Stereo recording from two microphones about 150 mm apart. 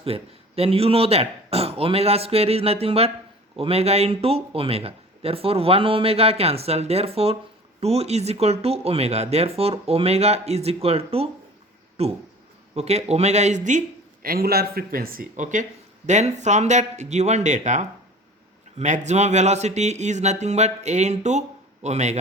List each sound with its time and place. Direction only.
0.0 s a man's voice: 40° right (ahead or behind)